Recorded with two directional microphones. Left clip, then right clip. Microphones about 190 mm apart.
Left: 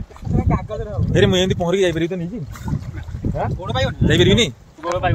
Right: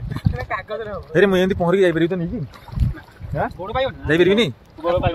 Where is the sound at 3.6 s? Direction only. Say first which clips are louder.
Even; 55° left (ahead or behind).